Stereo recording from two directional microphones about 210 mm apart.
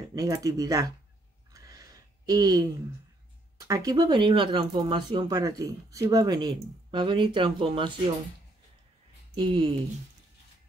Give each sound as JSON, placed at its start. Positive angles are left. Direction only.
{"t": 0.1, "sound": "speech", "side_deg": -15}
{"t": 1.5, "sound": "a sound", "side_deg": -15}
{"t": 3.5, "sound": "speech", "side_deg": -15}
{"t": 9.3, "sound": "speech", "side_deg": -25}